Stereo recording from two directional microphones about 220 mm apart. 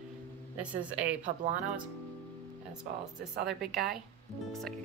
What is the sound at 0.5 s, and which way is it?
Speech, 5° right (ahead or behind).